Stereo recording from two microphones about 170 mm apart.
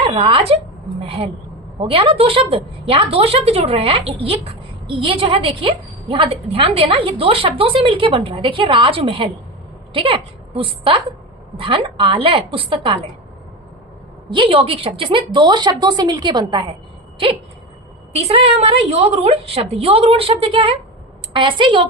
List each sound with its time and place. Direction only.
0.0 s a woman's voice: 30° right (ahead or behind)
14.3 s a woman's voice: 30° right (ahead or behind)
18.1 s a woman's voice: 35° right (ahead or behind)